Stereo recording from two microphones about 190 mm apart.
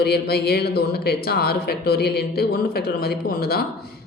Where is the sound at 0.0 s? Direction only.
55° left (ahead or behind).